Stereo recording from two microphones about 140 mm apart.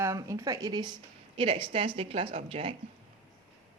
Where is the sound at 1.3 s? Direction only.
40° right (ahead or behind).